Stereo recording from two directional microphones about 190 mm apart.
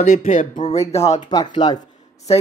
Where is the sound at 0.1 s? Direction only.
45° left (ahead or behind).